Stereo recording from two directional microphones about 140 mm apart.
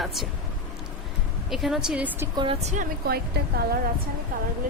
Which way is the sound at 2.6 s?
70° right (ahead or behind).